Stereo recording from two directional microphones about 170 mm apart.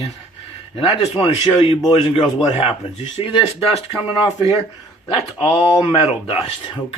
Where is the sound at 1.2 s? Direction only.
30° left (ahead or behind).